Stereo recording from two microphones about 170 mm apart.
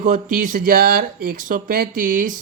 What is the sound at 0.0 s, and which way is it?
Speech, 50° right (ahead or behind).